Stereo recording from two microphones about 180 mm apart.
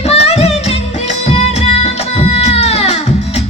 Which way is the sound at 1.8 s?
35° left (ahead or behind).